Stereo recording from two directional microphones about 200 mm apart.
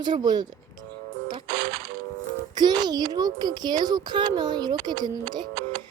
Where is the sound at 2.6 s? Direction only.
20° right (ahead or behind).